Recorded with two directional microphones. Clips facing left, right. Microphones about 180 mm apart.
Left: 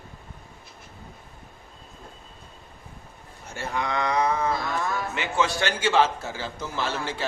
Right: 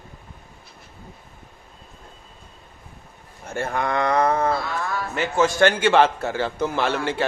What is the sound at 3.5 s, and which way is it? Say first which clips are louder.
A man's voice: right 5 dB; 55° right (ahead or behind).